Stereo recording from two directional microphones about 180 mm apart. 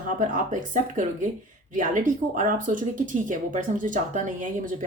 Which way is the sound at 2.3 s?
45° right (ahead or behind).